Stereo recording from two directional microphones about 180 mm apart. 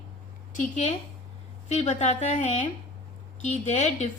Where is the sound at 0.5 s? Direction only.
40° left (ahead or behind).